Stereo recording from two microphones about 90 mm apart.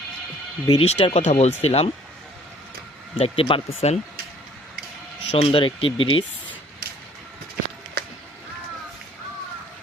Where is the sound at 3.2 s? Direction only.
90° left.